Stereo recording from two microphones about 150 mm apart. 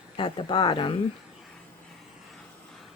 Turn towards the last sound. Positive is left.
turn(degrees=35)  # may be behind; listen again after turning